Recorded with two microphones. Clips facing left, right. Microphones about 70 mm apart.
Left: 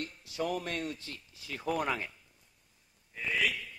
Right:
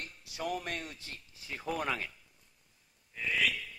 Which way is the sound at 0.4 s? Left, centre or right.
Left.